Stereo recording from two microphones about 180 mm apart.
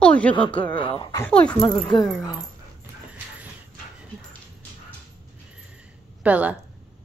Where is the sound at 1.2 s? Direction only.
5° left (ahead or behind).